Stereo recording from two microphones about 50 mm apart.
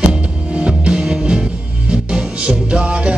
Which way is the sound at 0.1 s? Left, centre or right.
Centre.